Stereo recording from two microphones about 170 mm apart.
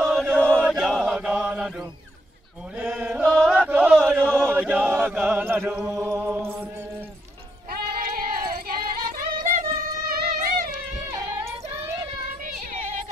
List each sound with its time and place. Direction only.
0.0 s chant: centre (ahead or behind)
2.8 s chant: 10° right (ahead or behind)
3.3 s chant: 5° left (ahead or behind)
3.5 s music: 10° right (ahead or behind)
4.3 s chant: 5° right (ahead or behind)
8.0 s a sound: 60° right (ahead or behind)
9.4 s music: 50° right (ahead or behind)